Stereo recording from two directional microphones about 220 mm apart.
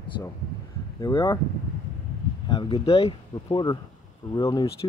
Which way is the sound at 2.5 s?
20° left (ahead or behind).